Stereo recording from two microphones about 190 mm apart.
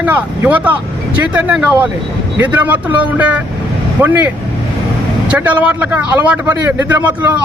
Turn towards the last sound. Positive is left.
turn(degrees=-10)  # may be behind; listen again after turning